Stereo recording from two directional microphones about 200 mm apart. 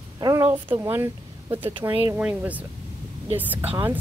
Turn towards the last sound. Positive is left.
turn(degrees=-10)  # may be behind; listen again after turning